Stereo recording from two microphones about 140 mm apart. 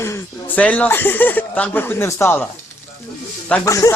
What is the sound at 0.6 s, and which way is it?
Speech, 10° left (ahead or behind).